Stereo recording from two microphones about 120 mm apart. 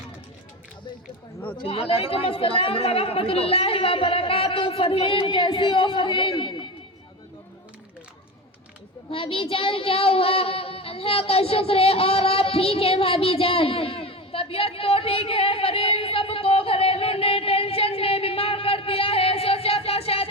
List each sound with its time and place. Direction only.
1.5 s speech: 50° left (ahead or behind)
9.0 s child singing: 50° left (ahead or behind)